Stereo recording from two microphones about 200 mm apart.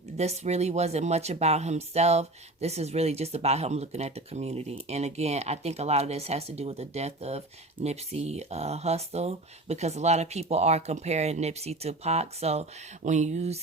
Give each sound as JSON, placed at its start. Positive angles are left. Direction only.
{"t": 0.2, "sound": "speech", "side_deg": -35}